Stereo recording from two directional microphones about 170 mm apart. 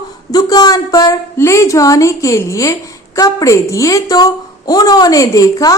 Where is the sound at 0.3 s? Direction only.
20° left (ahead or behind).